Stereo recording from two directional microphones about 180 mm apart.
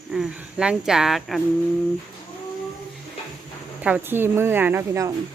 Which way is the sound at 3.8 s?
10° right (ahead or behind).